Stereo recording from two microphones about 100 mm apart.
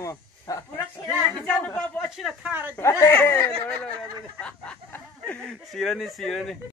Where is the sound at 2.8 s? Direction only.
30° left (ahead or behind); by 6.6 s 5° left (ahead or behind).